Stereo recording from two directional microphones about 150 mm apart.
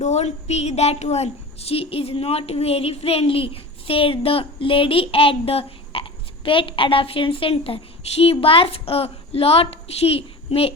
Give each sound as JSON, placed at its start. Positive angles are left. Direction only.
{"t": 0.0, "sound": "a woman's voice", "side_deg": 50}